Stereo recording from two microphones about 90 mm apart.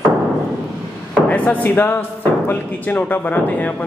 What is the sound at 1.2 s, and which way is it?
A man's voice, 15° left (ahead or behind).